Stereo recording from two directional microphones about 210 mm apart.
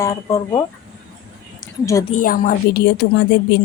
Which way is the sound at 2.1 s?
40° left (ahead or behind).